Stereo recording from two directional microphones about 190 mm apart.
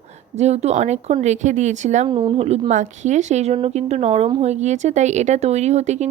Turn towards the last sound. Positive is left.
turn(degrees=-35)  # may be behind; listen again after turning